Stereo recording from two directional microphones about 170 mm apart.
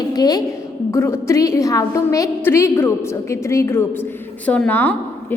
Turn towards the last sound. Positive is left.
turn(degrees=10)  # may be behind; listen again after turning